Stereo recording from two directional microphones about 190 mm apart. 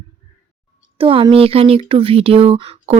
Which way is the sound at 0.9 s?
30° right (ahead or behind).